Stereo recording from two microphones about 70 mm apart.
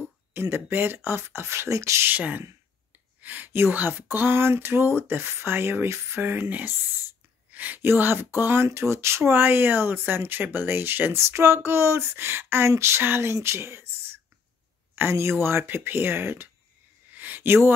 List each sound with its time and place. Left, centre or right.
0.0 s speech: right
2.0 s speech: right
15.0 s speech: right
17.1 s a sound: right